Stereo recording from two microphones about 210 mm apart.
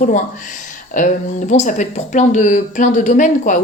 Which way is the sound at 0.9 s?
40° left (ahead or behind).